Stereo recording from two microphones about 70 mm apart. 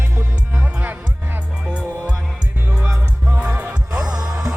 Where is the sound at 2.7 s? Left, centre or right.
Centre.